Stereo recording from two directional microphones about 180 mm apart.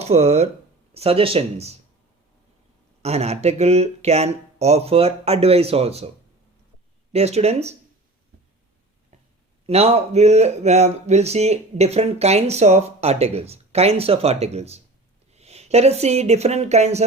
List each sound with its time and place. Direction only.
0.0 s speech: 35° right (ahead or behind)
3.0 s speech: 35° right (ahead or behind)
7.1 s speech: 35° right (ahead or behind)
9.6 s speech: 35° right (ahead or behind)